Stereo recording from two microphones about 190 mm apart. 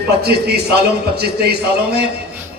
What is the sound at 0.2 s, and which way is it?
A man's voice, 55° right (ahead or behind).